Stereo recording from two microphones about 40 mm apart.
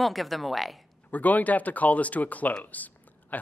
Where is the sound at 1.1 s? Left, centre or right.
Left.